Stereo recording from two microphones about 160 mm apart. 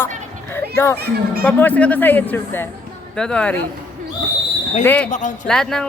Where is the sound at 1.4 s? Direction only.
10° left (ahead or behind).